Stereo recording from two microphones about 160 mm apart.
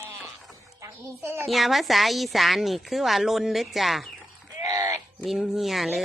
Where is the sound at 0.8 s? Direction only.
15° right (ahead or behind).